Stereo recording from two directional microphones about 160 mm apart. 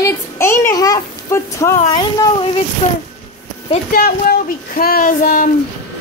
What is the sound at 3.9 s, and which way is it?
Speech, 65° left (ahead or behind).